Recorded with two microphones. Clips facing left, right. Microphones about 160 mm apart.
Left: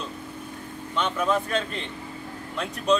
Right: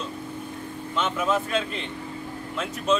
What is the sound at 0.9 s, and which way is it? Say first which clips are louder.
Speech: even; centre (ahead or behind).